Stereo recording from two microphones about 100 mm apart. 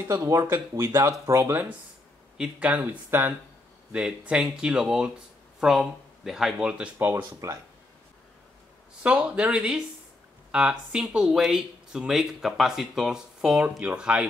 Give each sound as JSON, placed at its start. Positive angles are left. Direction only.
{"t": 0.1, "sound": "speech", "side_deg": -30}
{"t": 2.3, "sound": "speech", "side_deg": -10}
{"t": 4.3, "sound": "speech", "side_deg": -5}
{"t": 6.7, "sound": "speech", "side_deg": -15}
{"t": 9.0, "sound": "speech", "side_deg": -10}